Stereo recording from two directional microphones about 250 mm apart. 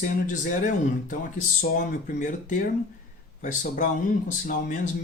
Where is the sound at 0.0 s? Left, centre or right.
Left.